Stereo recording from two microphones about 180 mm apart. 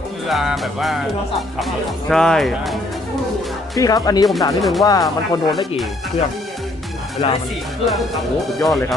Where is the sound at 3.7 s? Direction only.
20° left (ahead or behind).